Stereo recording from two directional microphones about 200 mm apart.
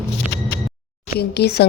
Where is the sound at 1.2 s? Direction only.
55° left (ahead or behind).